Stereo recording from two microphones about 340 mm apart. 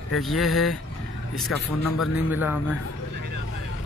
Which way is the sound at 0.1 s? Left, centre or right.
Centre.